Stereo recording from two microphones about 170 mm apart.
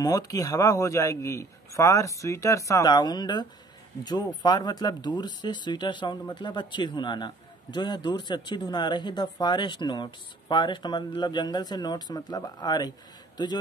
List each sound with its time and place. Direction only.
0.0 s speech: 20° left (ahead or behind)